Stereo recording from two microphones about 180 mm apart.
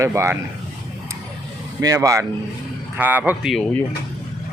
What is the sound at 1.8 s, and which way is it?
Speech, 20° right (ahead or behind).